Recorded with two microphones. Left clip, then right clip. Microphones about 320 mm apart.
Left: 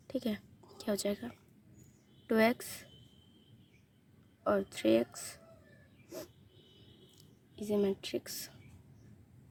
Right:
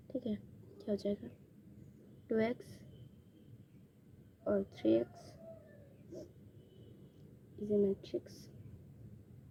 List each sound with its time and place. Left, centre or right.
0.1 s a woman's voice: left
4.4 s a woman's voice: left
7.5 s a woman's voice: left